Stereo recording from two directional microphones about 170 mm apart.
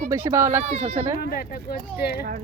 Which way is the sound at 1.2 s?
60° left (ahead or behind).